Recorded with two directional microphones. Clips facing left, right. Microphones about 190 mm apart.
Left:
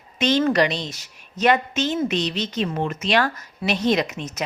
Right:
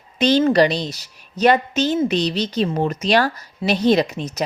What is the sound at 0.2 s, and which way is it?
A woman's voice, 35° right (ahead or behind).